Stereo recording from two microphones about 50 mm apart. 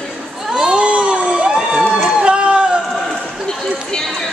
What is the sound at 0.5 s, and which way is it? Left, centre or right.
Crowd, centre.